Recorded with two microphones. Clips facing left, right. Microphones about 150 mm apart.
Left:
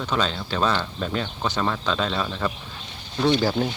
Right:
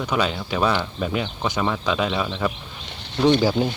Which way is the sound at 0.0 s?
10° right (ahead or behind).